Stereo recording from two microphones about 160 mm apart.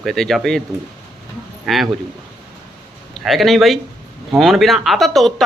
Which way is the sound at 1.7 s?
Centre (ahead or behind).